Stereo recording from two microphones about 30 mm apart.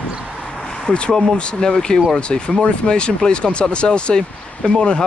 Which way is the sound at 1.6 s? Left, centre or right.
Left.